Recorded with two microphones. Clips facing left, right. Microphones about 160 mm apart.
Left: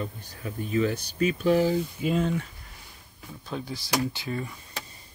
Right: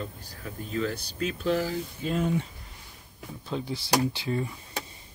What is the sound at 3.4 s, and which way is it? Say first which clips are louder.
Speech: right 2 dB; 25° right (ahead or behind).